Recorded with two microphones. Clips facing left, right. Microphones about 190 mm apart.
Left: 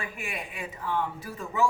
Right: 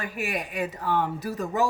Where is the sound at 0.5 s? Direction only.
40° right (ahead or behind).